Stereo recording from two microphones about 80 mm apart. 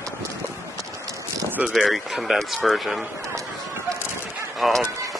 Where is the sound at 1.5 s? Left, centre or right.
Centre.